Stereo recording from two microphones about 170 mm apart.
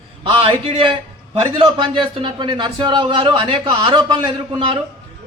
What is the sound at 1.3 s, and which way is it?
A man's voice, 30° right (ahead or behind).